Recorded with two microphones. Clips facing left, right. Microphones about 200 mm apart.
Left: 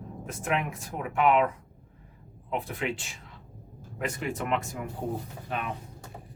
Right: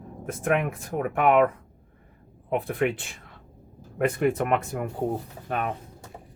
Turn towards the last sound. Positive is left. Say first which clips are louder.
# right 5 dB
turn(degrees=-50)  # may be behind; listen again after turning